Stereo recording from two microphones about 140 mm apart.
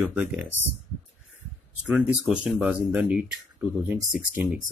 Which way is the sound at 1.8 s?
10° right (ahead or behind).